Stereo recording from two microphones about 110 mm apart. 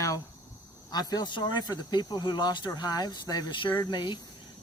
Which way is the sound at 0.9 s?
40° left (ahead or behind).